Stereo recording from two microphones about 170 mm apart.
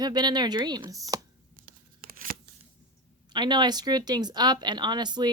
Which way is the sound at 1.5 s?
55° right (ahead or behind).